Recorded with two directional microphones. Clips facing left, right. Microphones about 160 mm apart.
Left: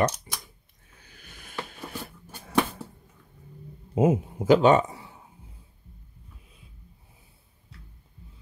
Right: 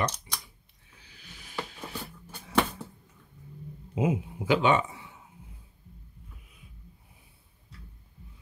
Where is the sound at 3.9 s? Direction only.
45° left (ahead or behind).